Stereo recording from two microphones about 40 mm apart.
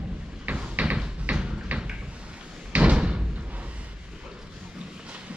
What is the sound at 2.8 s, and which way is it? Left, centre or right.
Slam, right.